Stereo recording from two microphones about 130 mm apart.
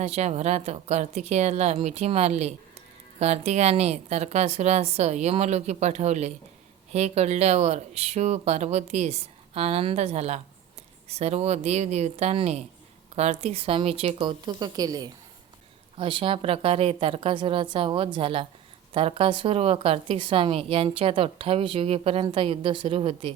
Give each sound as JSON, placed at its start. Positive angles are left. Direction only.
{"t": 0.0, "sound": "a woman's voice", "side_deg": -60}
{"t": 16.0, "sound": "a woman's voice", "side_deg": -40}